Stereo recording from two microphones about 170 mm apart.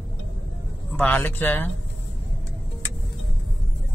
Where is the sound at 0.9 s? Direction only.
10° left (ahead or behind).